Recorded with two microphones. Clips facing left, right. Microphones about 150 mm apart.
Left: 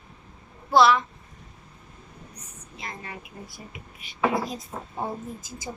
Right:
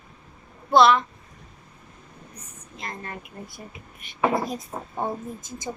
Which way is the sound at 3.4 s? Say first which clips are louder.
Right 1 dB; 55° right (ahead or behind).